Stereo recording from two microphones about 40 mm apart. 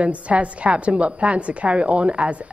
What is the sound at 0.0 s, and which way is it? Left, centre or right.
A woman's voice, right.